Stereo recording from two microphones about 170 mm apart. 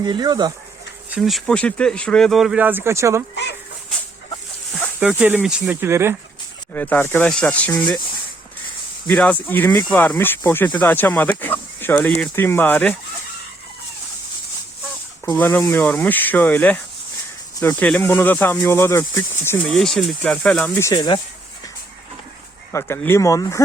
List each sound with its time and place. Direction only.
0.0 s speech: 25° right (ahead or behind)
1.1 s speech: centre (ahead or behind); by 3.2 s 15° right (ahead or behind)
4.7 s speech: 10° right (ahead or behind)
6.7 s speech: 10° left (ahead or behind)
9.0 s speech: 10° left (ahead or behind)
15.4 s speech: 10° left (ahead or behind)
19.6 s speech: 5° left (ahead or behind); by 21.2 s 20° left (ahead or behind)
22.7 s speech: 15° left (ahead or behind)